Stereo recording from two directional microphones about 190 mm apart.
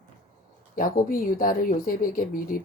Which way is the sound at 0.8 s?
45° left (ahead or behind).